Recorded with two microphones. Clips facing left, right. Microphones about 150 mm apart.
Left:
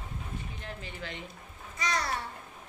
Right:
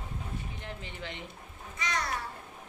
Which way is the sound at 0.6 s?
20° right (ahead or behind).